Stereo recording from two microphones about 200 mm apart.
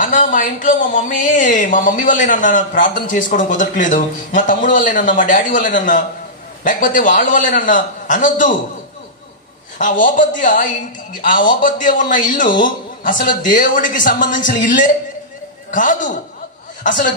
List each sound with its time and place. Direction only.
0.0 s speech: 40° left (ahead or behind)
9.8 s speech: 40° left (ahead or behind)